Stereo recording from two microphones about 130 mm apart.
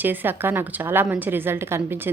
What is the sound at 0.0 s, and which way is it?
A woman's voice, 15° right (ahead or behind).